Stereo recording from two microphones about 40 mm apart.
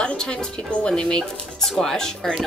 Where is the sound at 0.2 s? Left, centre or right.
Left.